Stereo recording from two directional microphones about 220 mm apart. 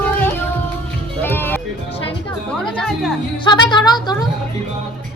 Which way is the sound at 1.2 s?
10° left (ahead or behind).